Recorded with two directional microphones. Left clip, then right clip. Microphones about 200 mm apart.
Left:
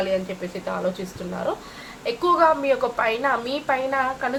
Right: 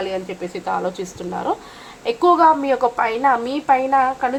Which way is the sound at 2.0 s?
40° right (ahead or behind).